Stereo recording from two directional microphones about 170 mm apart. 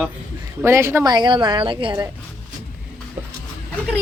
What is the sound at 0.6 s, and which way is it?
A woman's voice, 15° right (ahead or behind).